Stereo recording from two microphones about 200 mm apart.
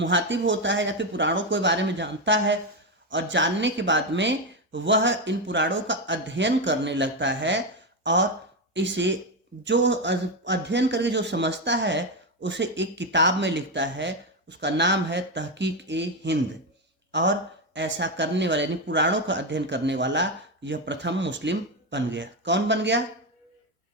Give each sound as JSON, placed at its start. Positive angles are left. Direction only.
{"t": 0.0, "sound": "speech", "side_deg": -65}